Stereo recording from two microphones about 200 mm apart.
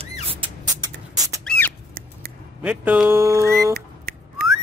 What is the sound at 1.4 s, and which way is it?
Squawk, 5° left (ahead or behind).